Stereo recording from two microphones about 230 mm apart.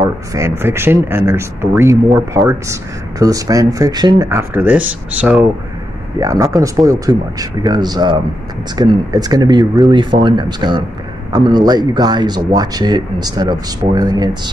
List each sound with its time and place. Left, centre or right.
0.3 s speech: centre